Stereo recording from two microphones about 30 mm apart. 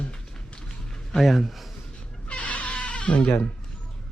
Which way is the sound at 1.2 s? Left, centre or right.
Centre.